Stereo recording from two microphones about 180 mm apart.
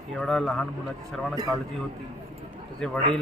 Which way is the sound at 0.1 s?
5° left (ahead or behind).